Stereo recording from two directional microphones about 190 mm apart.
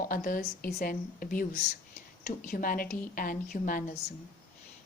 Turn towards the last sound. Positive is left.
turn(degrees=45)  # may be behind; listen again after turning